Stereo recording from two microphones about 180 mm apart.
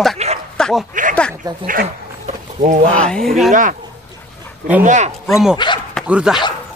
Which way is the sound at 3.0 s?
5° left (ahead or behind).